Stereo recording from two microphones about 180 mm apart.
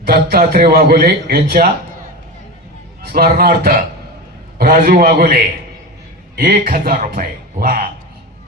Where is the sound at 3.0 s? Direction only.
55° right (ahead or behind).